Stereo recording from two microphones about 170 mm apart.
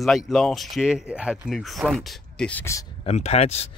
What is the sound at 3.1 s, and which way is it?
Speech, 40° left (ahead or behind).